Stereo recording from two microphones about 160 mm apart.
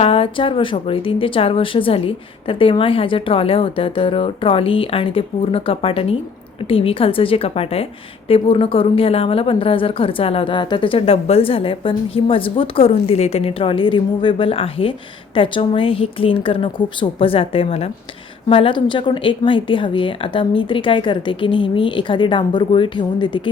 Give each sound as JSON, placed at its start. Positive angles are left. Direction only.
{"t": 0.0, "sound": "a woman's voice", "side_deg": 35}